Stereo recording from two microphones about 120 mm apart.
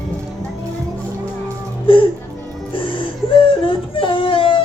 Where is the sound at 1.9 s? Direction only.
50° left (ahead or behind).